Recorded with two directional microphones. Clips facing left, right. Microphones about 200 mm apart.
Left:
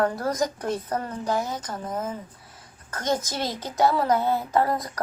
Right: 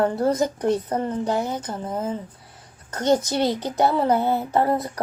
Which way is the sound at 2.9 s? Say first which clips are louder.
Right 7 dB; 35° right (ahead or behind).